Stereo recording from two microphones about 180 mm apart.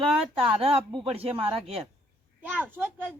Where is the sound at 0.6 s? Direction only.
30° right (ahead or behind).